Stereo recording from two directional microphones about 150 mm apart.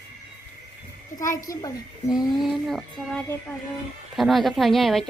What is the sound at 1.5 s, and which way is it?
Speech, 25° left (ahead or behind).